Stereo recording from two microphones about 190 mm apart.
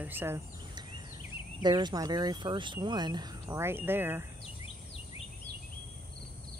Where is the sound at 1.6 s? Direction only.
20° right (ahead or behind).